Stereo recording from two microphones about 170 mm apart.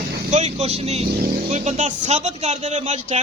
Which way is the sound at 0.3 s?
40° right (ahead or behind).